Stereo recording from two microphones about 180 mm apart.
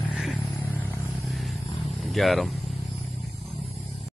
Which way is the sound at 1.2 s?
Centre (ahead or behind).